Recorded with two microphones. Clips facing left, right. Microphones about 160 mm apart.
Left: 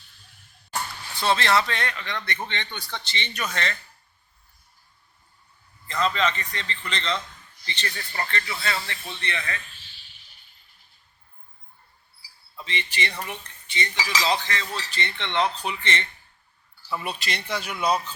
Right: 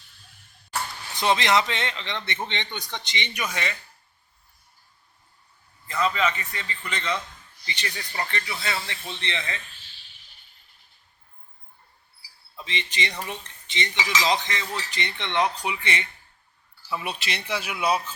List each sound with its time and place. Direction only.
1.1 s speech: 15° right (ahead or behind)
5.9 s speech: 5° right (ahead or behind)
12.6 s cutlery: 20° right (ahead or behind)
14.2 s speech: 20° right (ahead or behind)